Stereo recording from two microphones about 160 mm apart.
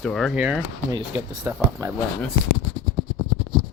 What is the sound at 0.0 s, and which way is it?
Speech, centre (ahead or behind).